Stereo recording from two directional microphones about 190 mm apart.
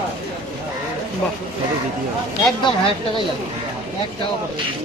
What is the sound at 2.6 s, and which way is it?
Speech, 25° left (ahead or behind).